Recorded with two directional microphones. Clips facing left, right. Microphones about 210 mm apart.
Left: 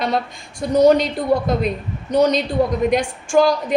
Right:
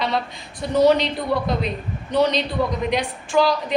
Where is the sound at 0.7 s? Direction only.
45° left (ahead or behind).